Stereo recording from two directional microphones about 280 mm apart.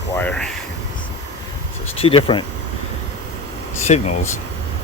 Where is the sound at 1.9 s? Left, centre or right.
Centre.